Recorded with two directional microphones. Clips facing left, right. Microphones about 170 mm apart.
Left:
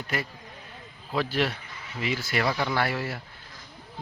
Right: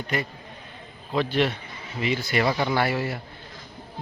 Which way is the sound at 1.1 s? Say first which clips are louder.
Right 3 dB; 5° left (ahead or behind).